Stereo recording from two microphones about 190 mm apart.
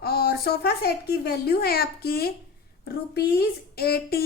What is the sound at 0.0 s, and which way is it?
A woman's voice, 55° left (ahead or behind).